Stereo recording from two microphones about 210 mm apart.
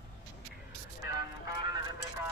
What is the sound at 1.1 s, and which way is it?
Vehicle, 20° right (ahead or behind).